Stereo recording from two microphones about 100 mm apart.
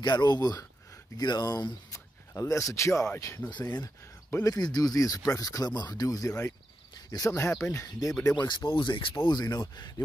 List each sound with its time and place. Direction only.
0.0 s speech: 45° left (ahead or behind)
4.6 s speech: 40° left (ahead or behind)
8.4 s speech: 50° left (ahead or behind)
9.2 s speech: 45° left (ahead or behind)